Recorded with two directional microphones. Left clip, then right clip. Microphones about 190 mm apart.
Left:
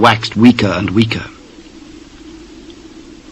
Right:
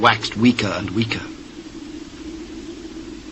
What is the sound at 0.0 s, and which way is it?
Speech, 25° left (ahead or behind).